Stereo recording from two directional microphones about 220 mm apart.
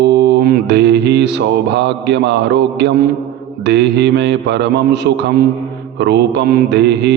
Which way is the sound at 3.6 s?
50° right (ahead or behind).